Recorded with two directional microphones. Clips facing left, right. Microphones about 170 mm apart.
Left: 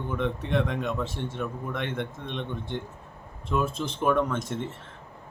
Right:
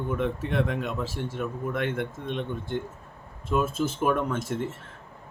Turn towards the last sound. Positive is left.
turn(degrees=-5)  # may be behind; listen again after turning